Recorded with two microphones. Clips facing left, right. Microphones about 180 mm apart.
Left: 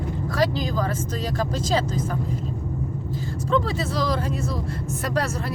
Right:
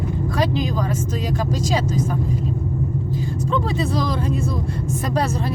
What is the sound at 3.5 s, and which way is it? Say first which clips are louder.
Speech: right 1 dB; 20° right (ahead or behind).